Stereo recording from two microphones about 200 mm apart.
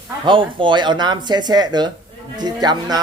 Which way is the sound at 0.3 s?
25° right (ahead or behind).